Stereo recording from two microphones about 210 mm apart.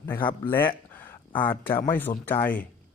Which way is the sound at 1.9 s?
10° left (ahead or behind).